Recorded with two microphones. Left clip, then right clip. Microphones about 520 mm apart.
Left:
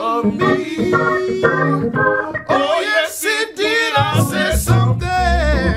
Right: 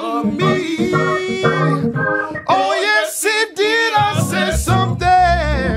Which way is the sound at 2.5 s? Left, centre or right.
Right.